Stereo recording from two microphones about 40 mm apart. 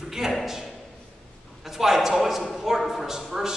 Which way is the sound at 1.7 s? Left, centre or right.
Centre.